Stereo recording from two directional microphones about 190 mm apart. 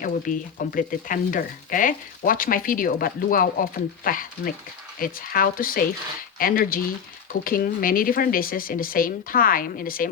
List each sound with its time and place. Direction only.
0.0 s speech: 45° left (ahead or behind)